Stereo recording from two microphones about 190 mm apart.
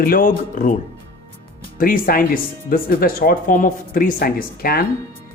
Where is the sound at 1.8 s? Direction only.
50° left (ahead or behind).